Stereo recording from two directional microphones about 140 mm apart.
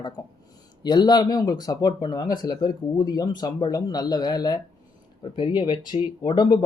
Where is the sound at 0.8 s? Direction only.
30° left (ahead or behind).